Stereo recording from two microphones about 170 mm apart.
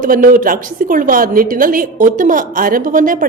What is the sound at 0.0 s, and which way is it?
A woman's voice, 55° right (ahead or behind).